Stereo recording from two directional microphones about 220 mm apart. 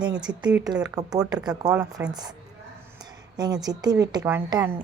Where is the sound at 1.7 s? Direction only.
5° right (ahead or behind).